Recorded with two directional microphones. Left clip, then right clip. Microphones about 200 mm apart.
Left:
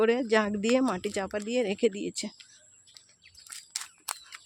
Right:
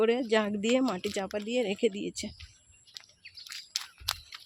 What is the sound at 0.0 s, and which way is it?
Speech, 5° left (ahead or behind).